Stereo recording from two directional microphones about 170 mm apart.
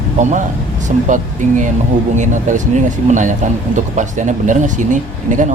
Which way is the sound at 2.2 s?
45° right (ahead or behind).